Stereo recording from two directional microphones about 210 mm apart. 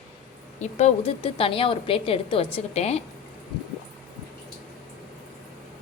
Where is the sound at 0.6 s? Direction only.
35° left (ahead or behind).